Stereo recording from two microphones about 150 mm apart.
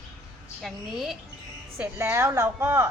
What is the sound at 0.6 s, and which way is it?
Speech, centre (ahead or behind).